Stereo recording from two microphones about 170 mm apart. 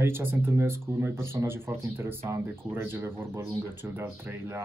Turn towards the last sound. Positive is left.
turn(degrees=-15)  # may be behind; listen again after turning